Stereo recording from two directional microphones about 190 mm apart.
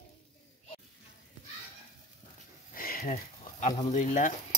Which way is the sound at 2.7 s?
50° left (ahead or behind).